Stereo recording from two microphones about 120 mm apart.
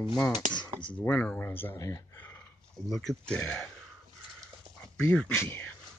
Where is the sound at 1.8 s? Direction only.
30° left (ahead or behind).